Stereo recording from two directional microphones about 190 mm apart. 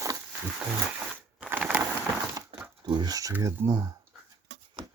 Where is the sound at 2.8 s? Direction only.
20° right (ahead or behind).